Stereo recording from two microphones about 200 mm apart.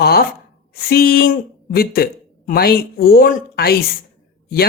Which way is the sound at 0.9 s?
50° left (ahead or behind).